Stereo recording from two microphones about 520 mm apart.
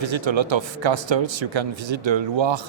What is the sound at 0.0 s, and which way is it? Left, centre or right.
Speech, right.